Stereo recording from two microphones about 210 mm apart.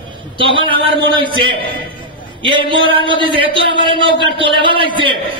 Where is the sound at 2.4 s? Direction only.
25° right (ahead or behind).